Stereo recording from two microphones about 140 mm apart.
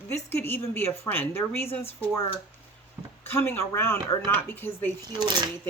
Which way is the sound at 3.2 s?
15° left (ahead or behind).